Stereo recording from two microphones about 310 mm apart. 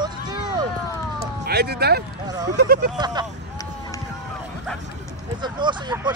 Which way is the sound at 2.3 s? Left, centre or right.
Centre.